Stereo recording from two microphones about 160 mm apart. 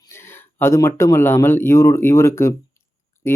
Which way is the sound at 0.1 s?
15° left (ahead or behind).